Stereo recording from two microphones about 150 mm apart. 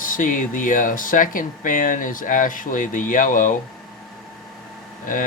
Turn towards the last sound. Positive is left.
turn(degrees=65)  # may be behind; listen again after turning